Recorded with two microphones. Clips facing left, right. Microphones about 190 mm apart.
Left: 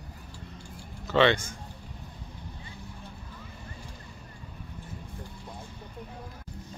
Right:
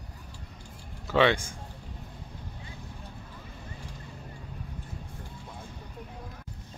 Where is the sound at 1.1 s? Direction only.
5° right (ahead or behind).